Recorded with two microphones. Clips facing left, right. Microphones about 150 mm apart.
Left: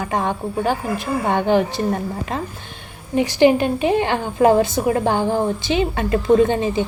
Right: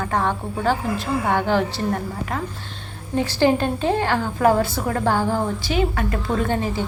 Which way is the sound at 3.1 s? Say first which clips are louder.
Left 4 dB; 15° left (ahead or behind).